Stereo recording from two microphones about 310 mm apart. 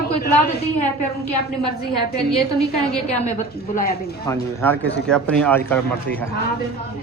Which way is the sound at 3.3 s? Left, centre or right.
Left.